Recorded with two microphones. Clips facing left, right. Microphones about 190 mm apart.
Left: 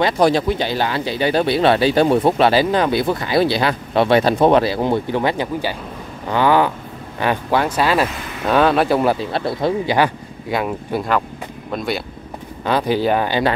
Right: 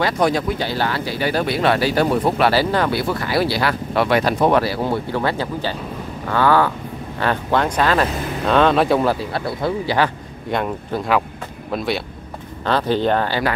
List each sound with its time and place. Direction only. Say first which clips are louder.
0.2 s speech: left 3 dB; 30° left (ahead or behind); by 9.0 s centre (ahead or behind)
9.0 s speech: left 2 dB; 20° left (ahead or behind)
10.5 s speech: left 1 dB; 5° left (ahead or behind)
12.6 s speech: left 1 dB; 10° left (ahead or behind)